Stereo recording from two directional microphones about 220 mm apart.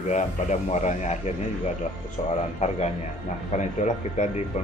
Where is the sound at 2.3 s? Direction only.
30° left (ahead or behind).